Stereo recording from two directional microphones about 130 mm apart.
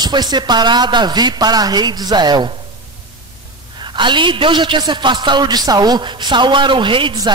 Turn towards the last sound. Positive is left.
turn(degrees=-35)  # may be behind; listen again after turning